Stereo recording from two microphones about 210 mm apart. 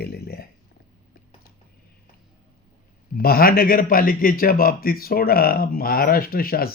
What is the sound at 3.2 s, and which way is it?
Speech, 45° left (ahead or behind).